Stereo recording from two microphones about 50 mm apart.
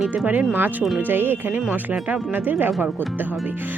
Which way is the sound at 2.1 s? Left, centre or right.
Right.